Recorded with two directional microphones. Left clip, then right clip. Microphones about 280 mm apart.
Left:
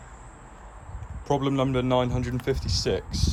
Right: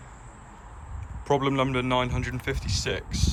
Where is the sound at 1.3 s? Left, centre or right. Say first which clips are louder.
Right 1 dB; centre.